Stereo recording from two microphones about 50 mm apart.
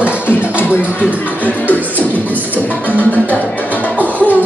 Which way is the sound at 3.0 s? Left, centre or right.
Left.